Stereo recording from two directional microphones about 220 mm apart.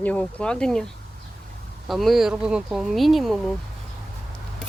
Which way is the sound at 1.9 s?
Centre (ahead or behind).